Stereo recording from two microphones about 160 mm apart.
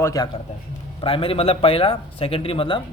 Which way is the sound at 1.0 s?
35° left (ahead or behind).